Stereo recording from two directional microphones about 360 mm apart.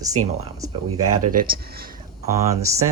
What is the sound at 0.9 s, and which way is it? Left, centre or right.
Speech, right.